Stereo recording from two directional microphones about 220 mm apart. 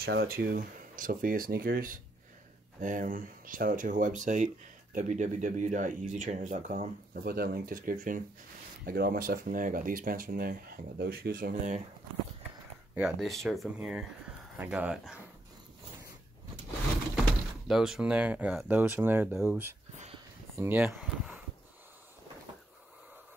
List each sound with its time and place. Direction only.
0.0 s speech: 45° right (ahead or behind)
12.9 s speech: 5° right (ahead or behind)
17.6 s speech: centre (ahead or behind)